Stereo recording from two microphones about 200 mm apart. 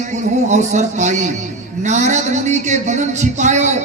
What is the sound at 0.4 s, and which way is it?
A man's voice, 35° right (ahead or behind).